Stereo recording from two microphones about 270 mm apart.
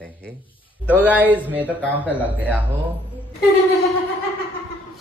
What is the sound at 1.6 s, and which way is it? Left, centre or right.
Speech, centre.